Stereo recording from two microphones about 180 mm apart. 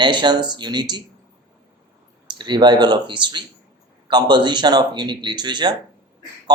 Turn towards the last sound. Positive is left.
turn(degrees=-25)  # may be behind; listen again after turning